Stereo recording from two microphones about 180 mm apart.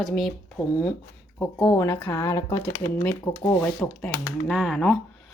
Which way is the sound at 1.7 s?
10° left (ahead or behind).